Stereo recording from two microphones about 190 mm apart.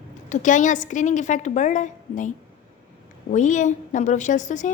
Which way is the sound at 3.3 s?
40° left (ahead or behind).